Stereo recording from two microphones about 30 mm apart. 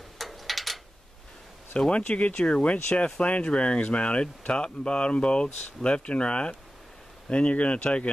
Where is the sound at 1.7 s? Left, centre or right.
Left.